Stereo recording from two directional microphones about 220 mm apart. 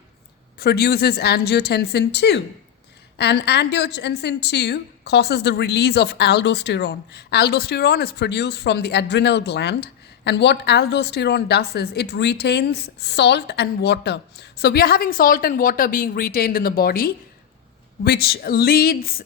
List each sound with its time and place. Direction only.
0.6 s a woman's voice: 45° left (ahead or behind)